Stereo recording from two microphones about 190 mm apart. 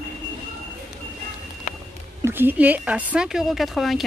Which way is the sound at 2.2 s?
10° right (ahead or behind).